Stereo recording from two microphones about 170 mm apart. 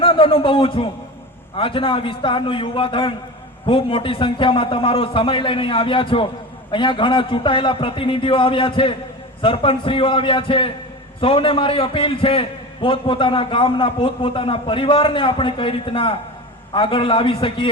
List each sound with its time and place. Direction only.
0.0 s a man's voice: 30° left (ahead or behind)